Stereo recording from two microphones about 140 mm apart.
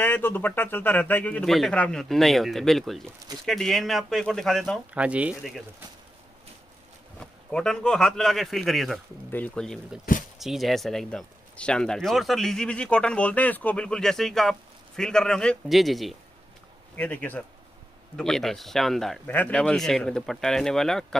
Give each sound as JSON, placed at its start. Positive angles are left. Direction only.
{"t": 0.0, "sound": "speech", "side_deg": 15}
{"t": 4.9, "sound": "speech", "side_deg": -10}
{"t": 7.2, "sound": "speech", "side_deg": 5}
{"t": 16.9, "sound": "speech", "side_deg": 10}